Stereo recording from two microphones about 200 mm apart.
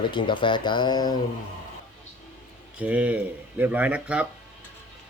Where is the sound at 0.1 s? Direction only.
25° left (ahead or behind).